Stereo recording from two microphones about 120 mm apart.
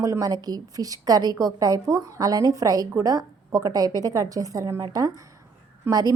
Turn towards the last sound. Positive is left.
turn(degrees=-30)  # may be behind; listen again after turning